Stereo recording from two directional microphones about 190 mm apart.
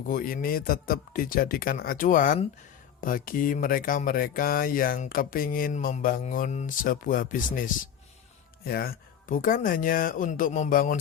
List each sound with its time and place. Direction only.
0.1 s speech: 50° left (ahead or behind)